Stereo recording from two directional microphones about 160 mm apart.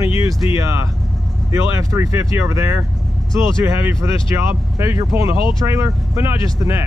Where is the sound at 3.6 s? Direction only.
15° right (ahead or behind).